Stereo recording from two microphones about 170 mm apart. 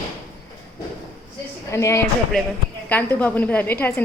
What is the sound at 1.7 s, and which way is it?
A woman's voice, 15° left (ahead or behind).